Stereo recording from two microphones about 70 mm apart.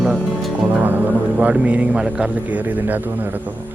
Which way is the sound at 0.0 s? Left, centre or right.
Centre.